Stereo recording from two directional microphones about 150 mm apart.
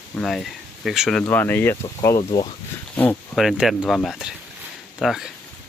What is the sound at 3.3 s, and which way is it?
Speech, centre (ahead or behind).